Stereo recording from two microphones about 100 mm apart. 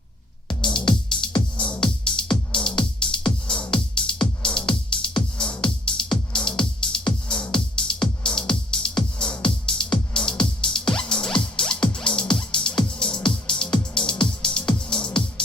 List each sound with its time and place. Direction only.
1.1 s music: 55° left (ahead or behind)
1.8 s music: 10° left (ahead or behind)